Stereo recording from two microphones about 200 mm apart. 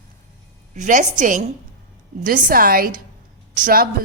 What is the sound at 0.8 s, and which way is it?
A woman's voice, 40° right (ahead or behind).